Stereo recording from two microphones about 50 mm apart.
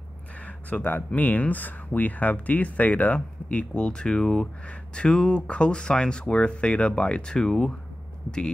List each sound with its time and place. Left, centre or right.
0.8 s speech: left; by 7.7 s centre